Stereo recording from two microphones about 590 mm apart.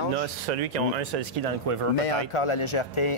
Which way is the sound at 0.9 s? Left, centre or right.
Right.